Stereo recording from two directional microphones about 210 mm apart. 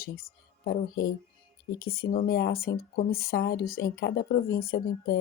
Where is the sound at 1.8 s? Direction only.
45° left (ahead or behind).